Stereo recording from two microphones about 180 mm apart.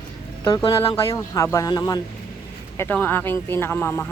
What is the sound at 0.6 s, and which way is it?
Speech, 25° left (ahead or behind).